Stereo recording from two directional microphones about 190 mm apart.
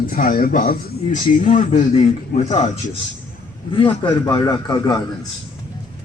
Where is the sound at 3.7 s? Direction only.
25° left (ahead or behind).